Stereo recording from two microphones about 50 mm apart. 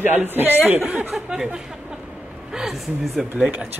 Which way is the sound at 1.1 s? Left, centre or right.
Centre.